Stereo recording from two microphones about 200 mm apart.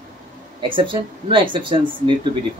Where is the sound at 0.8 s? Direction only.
25° right (ahead or behind).